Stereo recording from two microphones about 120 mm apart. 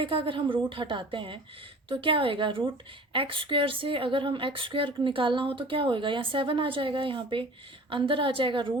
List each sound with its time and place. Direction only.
0.0 s speech: 50° right (ahead or behind)